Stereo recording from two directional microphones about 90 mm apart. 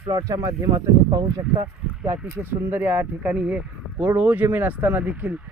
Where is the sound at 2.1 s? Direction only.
25° right (ahead or behind).